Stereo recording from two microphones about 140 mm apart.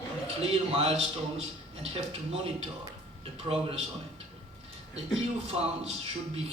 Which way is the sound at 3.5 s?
35° right (ahead or behind).